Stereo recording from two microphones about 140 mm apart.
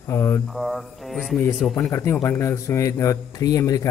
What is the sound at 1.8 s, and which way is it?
A man's voice, 20° left (ahead or behind).